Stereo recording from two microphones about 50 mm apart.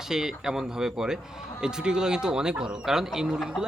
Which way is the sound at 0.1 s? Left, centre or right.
Centre.